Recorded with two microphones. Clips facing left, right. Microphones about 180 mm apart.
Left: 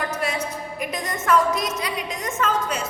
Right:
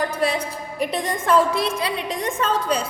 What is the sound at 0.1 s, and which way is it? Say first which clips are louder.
A woman's voice: right 3 dB; 30° right (ahead or behind).